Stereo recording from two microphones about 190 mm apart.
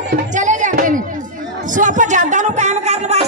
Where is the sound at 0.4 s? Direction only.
40° right (ahead or behind).